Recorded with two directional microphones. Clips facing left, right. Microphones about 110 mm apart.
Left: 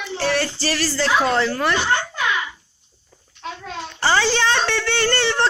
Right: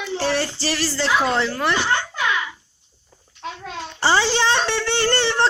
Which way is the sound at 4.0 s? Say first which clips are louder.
Even; 25° right (ahead or behind).